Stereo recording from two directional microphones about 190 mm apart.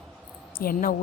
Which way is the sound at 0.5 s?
50° left (ahead or behind).